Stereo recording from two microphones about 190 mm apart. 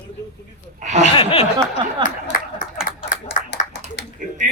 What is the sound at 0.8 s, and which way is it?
Speech, 40° right (ahead or behind).